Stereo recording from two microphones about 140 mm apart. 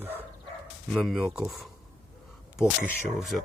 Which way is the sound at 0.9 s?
5° right (ahead or behind).